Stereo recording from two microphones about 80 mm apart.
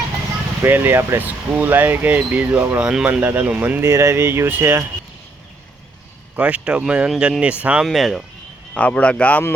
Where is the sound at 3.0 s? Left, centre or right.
Right.